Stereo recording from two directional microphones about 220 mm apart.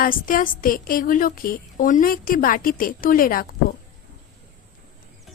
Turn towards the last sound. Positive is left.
turn(degrees=40)  # may be behind; listen again after turning